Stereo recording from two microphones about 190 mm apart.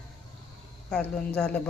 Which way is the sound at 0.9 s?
5° left (ahead or behind).